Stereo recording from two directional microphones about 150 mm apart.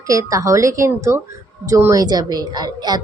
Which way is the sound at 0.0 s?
20° right (ahead or behind).